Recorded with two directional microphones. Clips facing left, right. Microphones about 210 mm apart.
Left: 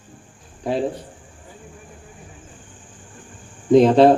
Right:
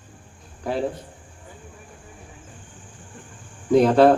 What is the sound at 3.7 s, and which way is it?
Speech, 25° left (ahead or behind).